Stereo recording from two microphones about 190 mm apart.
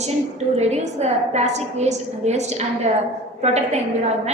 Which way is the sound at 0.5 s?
35° right (ahead or behind).